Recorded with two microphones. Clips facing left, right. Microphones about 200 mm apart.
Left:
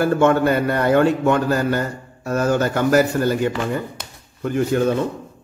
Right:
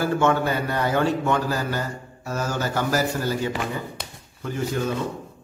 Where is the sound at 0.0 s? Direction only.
55° left (ahead or behind).